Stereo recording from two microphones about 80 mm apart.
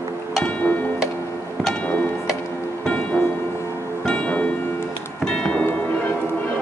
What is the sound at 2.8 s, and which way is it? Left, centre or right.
Music, centre.